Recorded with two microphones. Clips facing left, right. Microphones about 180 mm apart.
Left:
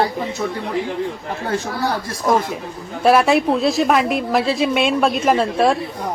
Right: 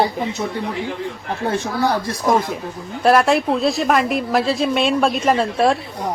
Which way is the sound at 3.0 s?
Centre (ahead or behind).